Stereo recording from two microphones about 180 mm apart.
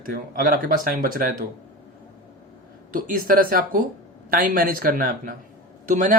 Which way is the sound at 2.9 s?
50° right (ahead or behind).